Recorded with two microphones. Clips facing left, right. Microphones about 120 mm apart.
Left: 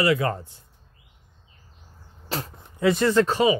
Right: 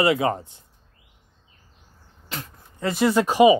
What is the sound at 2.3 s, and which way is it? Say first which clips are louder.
Speech: left 5 dB; 35° left (ahead or behind).